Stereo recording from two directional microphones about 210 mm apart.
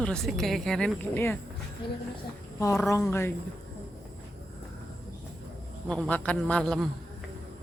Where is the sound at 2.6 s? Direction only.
15° left (ahead or behind).